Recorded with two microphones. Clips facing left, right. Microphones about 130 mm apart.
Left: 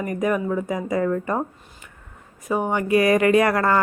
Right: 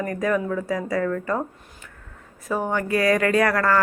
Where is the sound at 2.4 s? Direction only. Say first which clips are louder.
Left 2 dB; 15° left (ahead or behind).